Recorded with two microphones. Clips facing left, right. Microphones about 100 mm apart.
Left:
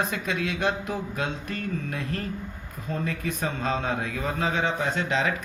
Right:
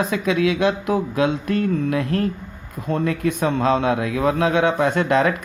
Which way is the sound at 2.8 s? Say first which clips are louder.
Right 9 dB; 75° right (ahead or behind).